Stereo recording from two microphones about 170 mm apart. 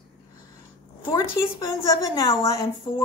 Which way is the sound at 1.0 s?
15° left (ahead or behind).